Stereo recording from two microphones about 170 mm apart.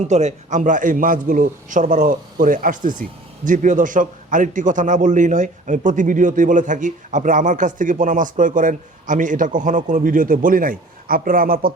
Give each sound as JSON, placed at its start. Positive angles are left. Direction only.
{"t": 0.0, "sound": "a man's voice", "side_deg": -45}